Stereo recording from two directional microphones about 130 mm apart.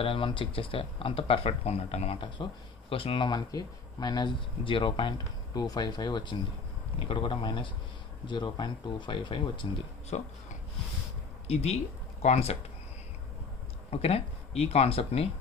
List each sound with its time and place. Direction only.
0.0 s speech: 45° left (ahead or behind)
10.1 s speech: 60° left (ahead or behind)
11.4 s speech: 55° left (ahead or behind)
13.8 s speech: 50° left (ahead or behind)